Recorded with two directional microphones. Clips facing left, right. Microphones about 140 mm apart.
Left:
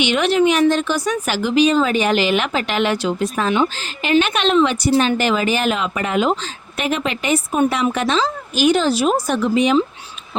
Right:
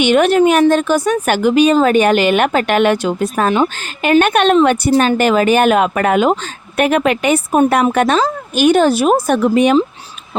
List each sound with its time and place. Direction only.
0.0 s a woman's voice: 50° right (ahead or behind)
7.6 s speech: 45° right (ahead or behind)